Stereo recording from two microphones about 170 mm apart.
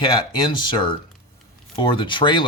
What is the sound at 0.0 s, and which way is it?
Speech, 25° left (ahead or behind).